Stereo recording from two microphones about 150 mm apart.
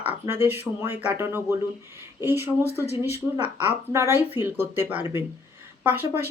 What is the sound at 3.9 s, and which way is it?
Speech, 20° right (ahead or behind).